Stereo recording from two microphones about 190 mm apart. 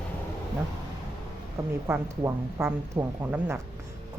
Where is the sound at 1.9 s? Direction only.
15° right (ahead or behind).